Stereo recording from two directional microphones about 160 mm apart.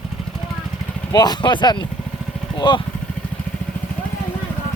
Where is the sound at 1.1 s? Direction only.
25° left (ahead or behind).